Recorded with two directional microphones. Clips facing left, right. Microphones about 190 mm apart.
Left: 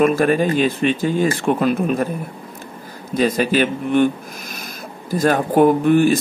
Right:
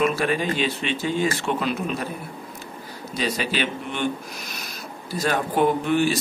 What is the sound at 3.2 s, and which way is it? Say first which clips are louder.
Speech: left 9 dB; 50° left (ahead or behind).